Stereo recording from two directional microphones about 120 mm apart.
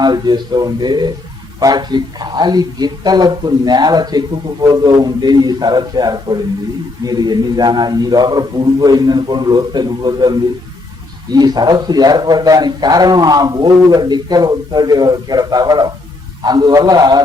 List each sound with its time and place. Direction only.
0.0 s a man's voice: 35° right (ahead or behind)